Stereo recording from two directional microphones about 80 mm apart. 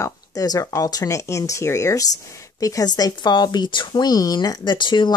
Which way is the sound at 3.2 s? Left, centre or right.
Left.